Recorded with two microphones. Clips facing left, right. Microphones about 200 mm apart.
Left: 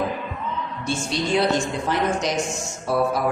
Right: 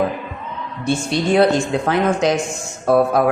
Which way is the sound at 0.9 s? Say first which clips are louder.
Right 6 dB; 60° right (ahead or behind).